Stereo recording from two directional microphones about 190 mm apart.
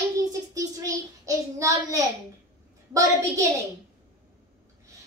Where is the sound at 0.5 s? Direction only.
15° right (ahead or behind).